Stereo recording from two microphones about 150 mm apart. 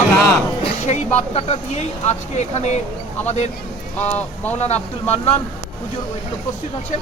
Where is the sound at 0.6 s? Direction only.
50° left (ahead or behind).